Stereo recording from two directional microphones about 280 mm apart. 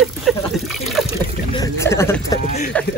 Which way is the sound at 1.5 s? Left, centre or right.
Centre.